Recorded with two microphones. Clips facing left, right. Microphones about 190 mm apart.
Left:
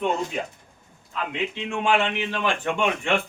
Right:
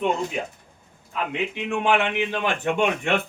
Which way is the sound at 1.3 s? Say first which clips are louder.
Right 2 dB; 15° right (ahead or behind).